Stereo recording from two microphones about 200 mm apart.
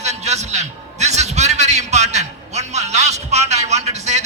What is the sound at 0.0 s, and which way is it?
Music, 35° right (ahead or behind).